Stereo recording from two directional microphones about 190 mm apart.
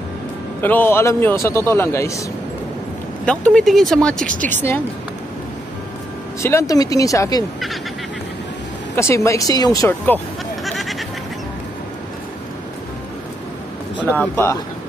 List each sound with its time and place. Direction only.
0.6 s a man's voice: 10° left (ahead or behind)
3.3 s a man's voice: 5° left (ahead or behind)
6.4 s a man's voice: 15° left (ahead or behind)
8.9 s speech: 15° left (ahead or behind)
14.1 s a man's voice: 10° left (ahead or behind)